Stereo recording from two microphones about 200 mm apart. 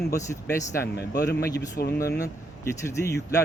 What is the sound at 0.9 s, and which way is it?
Speech, 55° left (ahead or behind).